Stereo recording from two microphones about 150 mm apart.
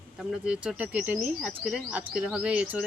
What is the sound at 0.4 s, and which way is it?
Speech, 5° right (ahead or behind).